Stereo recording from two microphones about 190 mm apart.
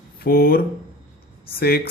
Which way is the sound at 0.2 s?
50° left (ahead or behind).